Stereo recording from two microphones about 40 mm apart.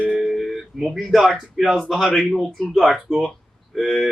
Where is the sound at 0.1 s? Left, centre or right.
Centre.